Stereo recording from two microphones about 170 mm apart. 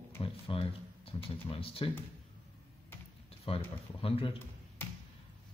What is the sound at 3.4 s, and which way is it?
Speech, 35° left (ahead or behind).